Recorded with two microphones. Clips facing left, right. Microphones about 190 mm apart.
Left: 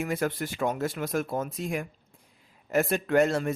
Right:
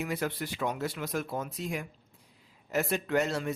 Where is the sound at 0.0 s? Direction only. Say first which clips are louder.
Left 4 dB; 50° left (ahead or behind).